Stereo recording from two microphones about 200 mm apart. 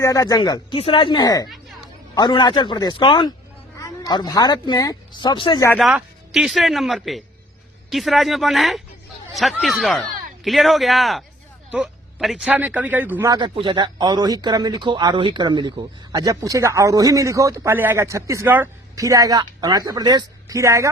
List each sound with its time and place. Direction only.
0.0 s speech: 15° left (ahead or behind)
1.5 s chatter: centre (ahead or behind)
2.1 s speech: 20° left (ahead or behind)
5.8 s a man's voice: 5° right (ahead or behind)